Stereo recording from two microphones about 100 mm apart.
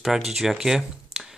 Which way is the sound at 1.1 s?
90° right.